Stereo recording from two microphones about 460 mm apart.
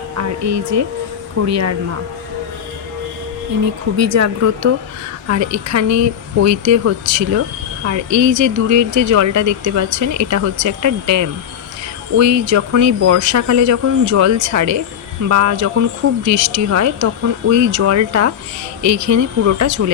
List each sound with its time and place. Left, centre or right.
0.2 s speech: right
3.9 s speech: right